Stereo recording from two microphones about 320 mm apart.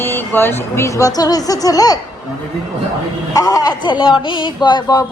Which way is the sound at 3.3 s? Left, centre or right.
Centre.